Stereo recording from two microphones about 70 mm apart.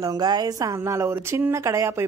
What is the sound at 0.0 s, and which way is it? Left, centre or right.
A woman's voice, right.